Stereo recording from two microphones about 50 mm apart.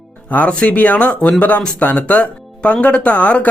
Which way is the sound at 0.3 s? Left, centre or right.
Left.